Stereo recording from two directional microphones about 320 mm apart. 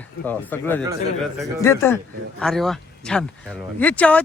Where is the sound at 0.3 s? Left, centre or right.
Centre.